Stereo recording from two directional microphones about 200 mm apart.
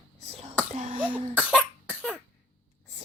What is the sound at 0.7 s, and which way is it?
Cough, 35° right (ahead or behind).